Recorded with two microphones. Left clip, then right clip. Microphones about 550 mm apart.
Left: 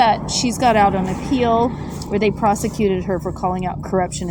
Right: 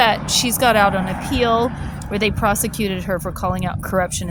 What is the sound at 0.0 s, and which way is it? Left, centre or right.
Speech, right.